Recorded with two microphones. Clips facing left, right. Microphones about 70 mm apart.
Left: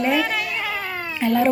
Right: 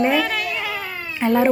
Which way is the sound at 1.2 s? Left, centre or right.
Right.